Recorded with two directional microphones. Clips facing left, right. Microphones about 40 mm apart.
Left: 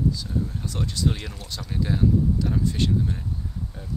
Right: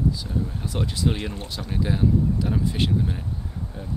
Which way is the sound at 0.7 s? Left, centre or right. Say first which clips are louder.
Right 3 dB; centre.